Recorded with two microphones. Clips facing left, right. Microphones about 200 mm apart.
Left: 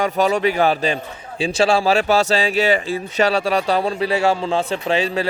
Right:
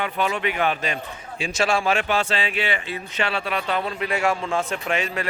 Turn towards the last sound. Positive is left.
turn(degrees=30)  # may be behind; listen again after turning